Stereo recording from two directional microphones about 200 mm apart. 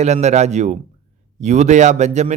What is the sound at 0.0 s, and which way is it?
Speech, 35° right (ahead or behind).